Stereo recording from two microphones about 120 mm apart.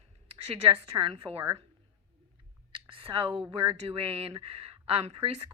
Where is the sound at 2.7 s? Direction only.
45° right (ahead or behind).